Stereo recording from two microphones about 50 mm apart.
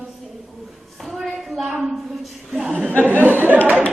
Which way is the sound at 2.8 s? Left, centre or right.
Left.